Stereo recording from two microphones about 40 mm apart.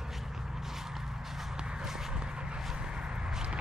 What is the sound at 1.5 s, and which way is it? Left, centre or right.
Walk, centre.